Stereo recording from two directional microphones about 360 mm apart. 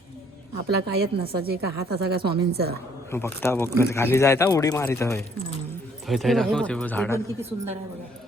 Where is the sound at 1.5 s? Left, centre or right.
Right.